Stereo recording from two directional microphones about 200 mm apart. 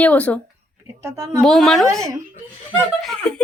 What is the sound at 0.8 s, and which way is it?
Speech, 15° right (ahead or behind).